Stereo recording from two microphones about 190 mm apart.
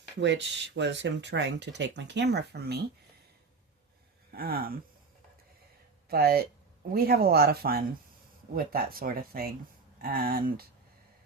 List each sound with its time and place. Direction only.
0.2 s speech: 70° right (ahead or behind)
4.4 s speech: 50° right (ahead or behind)
6.1 s speech: 55° right (ahead or behind)